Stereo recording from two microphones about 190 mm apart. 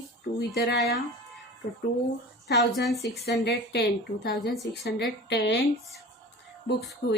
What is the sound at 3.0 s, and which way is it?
A woman's voice, 60° left (ahead or behind).